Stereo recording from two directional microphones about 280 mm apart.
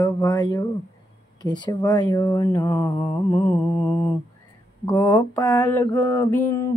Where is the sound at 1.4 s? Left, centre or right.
Centre.